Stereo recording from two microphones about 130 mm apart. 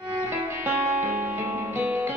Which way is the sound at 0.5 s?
20° right (ahead or behind).